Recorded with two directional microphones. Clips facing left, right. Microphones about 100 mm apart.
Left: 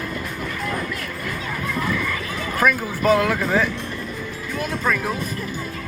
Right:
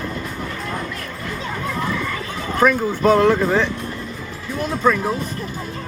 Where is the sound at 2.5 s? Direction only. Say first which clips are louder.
Right 4 dB; 30° right (ahead or behind).